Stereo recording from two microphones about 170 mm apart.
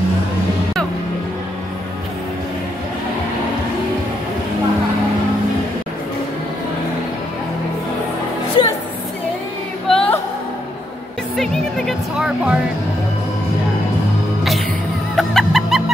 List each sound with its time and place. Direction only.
8.6 s a sound: 30° left (ahead or behind)
9.8 s music: 5° left (ahead or behind)
11.3 s music: centre (ahead or behind)
15.1 s music: centre (ahead or behind)